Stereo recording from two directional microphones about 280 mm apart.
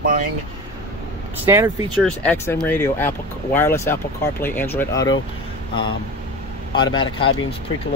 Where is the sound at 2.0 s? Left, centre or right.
Centre.